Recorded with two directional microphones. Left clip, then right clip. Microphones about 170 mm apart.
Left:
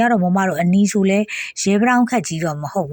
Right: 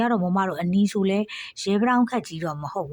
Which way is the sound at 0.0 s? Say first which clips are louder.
Left 7 dB; 15° left (ahead or behind).